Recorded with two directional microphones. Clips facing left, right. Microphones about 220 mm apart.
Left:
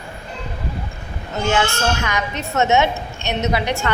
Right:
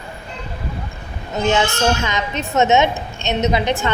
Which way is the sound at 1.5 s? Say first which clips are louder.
Right 2 dB; 20° right (ahead or behind).